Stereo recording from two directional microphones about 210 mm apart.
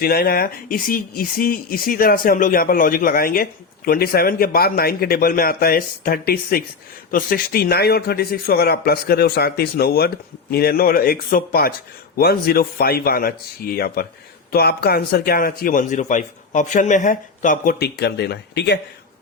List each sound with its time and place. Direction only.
0.0 s speech: 45° left (ahead or behind)